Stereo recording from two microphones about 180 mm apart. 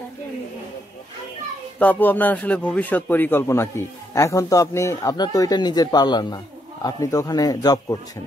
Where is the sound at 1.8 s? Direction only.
10° left (ahead or behind).